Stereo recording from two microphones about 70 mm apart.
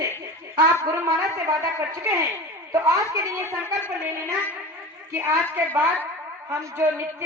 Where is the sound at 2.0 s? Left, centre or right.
Right.